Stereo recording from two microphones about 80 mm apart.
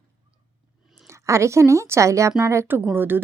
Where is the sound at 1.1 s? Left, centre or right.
Right.